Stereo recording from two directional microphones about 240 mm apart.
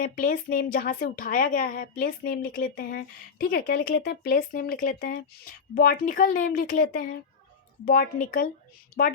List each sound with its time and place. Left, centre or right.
0.0 s a woman's voice: left